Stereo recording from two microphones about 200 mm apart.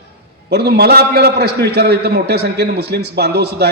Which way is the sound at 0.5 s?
55° right (ahead or behind).